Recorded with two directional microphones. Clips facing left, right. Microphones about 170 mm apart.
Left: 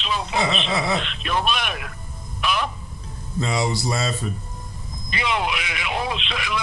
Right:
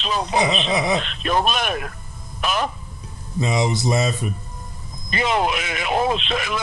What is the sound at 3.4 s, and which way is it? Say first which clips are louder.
Speech: right 3 dB; 20° right (ahead or behind).